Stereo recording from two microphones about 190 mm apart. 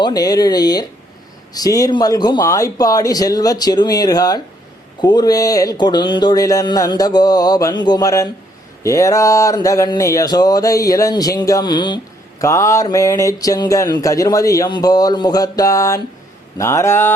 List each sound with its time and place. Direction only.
0.0 s speech: 20° left (ahead or behind)